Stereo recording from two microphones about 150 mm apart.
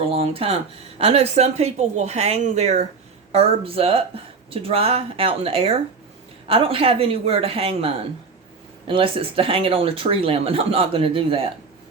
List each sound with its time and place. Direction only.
0.0 s a woman's voice: 40° right (ahead or behind)